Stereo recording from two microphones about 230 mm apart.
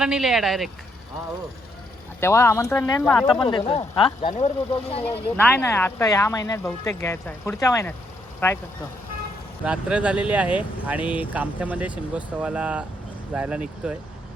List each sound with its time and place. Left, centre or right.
0.0 s speech: centre
2.2 s speech: centre
3.4 s speech: left
5.4 s speech: centre
9.6 s speech: centre